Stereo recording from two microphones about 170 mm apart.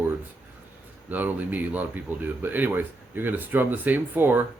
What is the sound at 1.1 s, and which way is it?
Speech, 10° right (ahead or behind).